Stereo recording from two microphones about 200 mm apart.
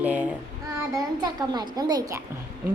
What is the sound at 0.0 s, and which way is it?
Child singing, 5° right (ahead or behind).